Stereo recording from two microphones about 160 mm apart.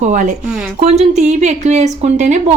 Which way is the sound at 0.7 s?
45° right (ahead or behind).